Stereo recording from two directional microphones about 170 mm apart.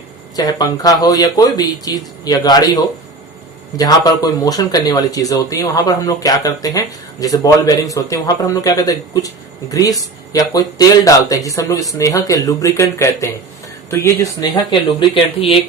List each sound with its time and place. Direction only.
0.3 s speech: 20° left (ahead or behind)